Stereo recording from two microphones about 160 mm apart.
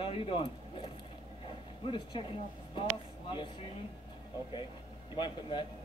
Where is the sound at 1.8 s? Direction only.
30° left (ahead or behind).